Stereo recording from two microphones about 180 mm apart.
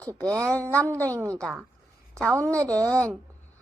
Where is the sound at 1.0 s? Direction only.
15° right (ahead or behind).